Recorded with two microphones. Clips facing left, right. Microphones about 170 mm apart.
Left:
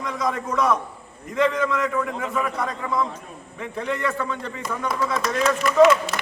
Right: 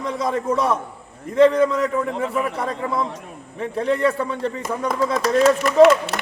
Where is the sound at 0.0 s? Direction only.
30° right (ahead or behind).